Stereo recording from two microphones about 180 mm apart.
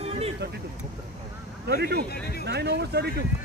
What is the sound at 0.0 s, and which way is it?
Vehicle, 35° right (ahead or behind).